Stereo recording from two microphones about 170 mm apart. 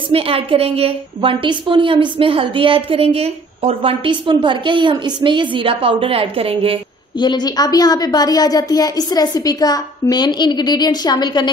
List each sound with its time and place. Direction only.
0.1 s a woman's voice: 35° right (ahead or behind)
7.2 s a woman's voice: 25° left (ahead or behind)